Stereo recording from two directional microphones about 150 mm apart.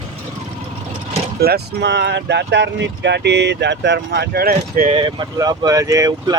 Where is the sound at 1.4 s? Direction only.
90° right.